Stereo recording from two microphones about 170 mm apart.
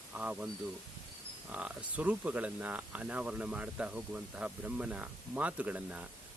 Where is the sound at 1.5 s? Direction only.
10° right (ahead or behind).